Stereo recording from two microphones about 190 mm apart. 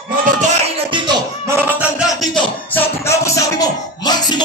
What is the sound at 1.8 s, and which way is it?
Music, centre (ahead or behind).